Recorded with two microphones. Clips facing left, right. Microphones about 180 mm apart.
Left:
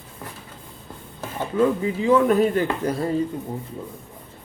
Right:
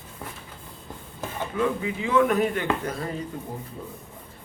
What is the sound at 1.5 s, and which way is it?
A man's voice, 35° left (ahead or behind).